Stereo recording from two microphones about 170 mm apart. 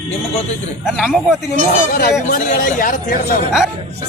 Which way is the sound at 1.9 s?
55° left (ahead or behind).